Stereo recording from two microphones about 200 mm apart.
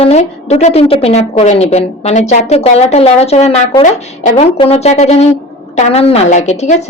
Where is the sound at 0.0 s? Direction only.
30° left (ahead or behind).